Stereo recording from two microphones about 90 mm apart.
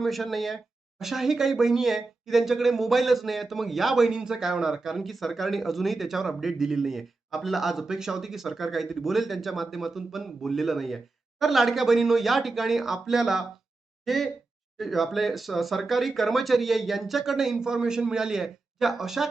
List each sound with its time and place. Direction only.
0.0 s speech: centre (ahead or behind)